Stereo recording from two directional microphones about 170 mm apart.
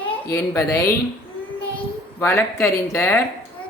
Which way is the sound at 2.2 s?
15° left (ahead or behind).